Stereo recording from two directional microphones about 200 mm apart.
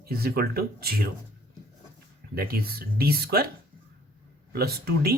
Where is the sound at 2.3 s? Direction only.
50° right (ahead or behind).